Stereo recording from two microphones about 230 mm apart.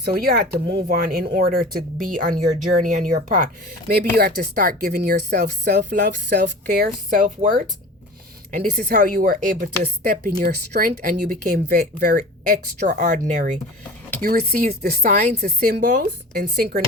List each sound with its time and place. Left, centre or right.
0.0 s speech: right